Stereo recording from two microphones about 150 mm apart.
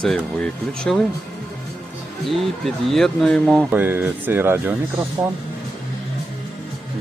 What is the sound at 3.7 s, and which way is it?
Speech, 15° right (ahead or behind).